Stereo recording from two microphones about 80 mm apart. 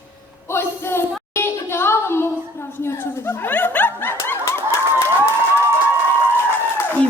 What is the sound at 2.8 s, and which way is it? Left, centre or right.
Snicker, left.